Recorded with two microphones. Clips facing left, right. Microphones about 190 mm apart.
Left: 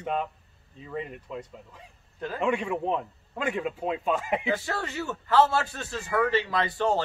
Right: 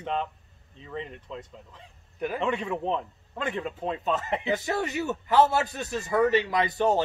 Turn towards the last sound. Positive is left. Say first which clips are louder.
# right 2 dB
turn(degrees=-15)  # may be behind; listen again after turning